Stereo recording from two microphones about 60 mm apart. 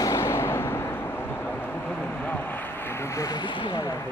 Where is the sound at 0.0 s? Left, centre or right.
Left.